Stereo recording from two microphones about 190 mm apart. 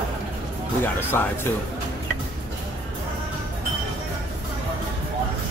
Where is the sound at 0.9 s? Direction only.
10° left (ahead or behind).